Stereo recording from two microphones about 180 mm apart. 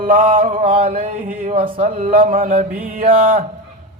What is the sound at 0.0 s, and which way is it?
A man's voice, 50° right (ahead or behind).